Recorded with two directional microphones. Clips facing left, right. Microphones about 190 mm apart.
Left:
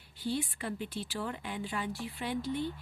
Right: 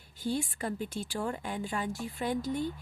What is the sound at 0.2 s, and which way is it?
Speech, 45° right (ahead or behind).